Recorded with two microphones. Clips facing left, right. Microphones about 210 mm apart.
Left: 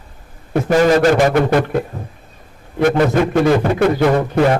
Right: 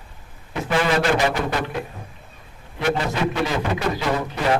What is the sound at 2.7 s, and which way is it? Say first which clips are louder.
A man's voice: left 9 dB; 50° left (ahead or behind).